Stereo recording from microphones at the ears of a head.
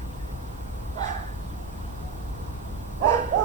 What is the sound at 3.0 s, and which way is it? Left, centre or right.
Bow-wow, right.